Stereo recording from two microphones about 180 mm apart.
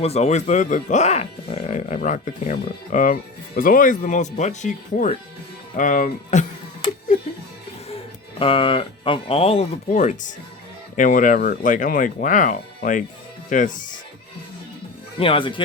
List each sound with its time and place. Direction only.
0.0 s speech: 35° left (ahead or behind)
8.4 s speech: 30° left (ahead or behind)
9.9 s speech: 45° left (ahead or behind)
15.2 s speech: 30° left (ahead or behind)